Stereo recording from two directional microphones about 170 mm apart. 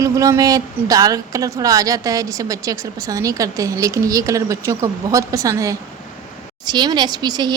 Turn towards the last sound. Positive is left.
turn(degrees=-25)  # may be behind; listen again after turning